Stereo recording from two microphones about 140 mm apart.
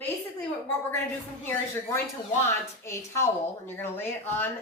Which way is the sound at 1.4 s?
15° left (ahead or behind).